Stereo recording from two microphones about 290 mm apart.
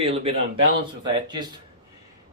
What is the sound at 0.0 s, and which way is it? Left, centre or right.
Speech, centre.